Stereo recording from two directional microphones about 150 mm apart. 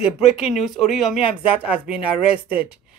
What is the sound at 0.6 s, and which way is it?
Speech, centre (ahead or behind).